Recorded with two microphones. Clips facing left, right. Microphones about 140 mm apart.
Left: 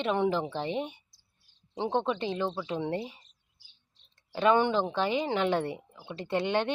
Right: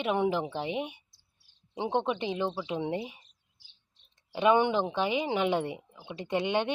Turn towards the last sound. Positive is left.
turn(degrees=-15)  # may be behind; listen again after turning